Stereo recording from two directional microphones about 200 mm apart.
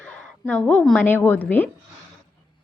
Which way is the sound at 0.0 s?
5° left (ahead or behind).